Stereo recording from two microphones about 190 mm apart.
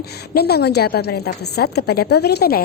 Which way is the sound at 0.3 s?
55° left (ahead or behind).